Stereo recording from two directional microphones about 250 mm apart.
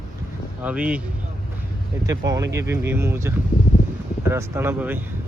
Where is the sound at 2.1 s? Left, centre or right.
Centre.